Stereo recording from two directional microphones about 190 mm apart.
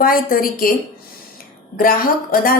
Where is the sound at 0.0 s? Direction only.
50° left (ahead or behind).